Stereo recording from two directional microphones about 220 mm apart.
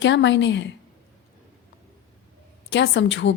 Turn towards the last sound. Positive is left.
turn(degrees=55)  # may be behind; listen again after turning